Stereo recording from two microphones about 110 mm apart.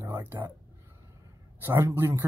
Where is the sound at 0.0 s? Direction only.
20° right (ahead or behind).